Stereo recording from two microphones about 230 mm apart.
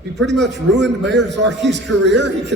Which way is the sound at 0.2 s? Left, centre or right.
Right.